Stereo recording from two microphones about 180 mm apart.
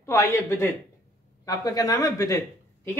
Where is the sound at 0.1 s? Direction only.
15° left (ahead or behind).